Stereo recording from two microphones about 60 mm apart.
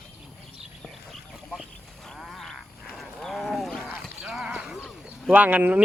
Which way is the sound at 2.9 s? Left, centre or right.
Centre.